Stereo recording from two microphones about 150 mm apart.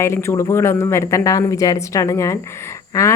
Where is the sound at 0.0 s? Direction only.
15° left (ahead or behind).